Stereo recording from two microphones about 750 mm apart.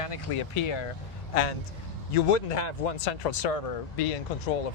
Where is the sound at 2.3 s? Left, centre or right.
Left.